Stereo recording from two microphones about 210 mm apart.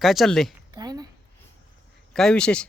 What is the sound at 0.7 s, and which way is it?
Speech, 20° right (ahead or behind).